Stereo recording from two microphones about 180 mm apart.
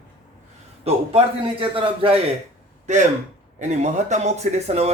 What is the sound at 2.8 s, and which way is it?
Speech, 40° right (ahead or behind).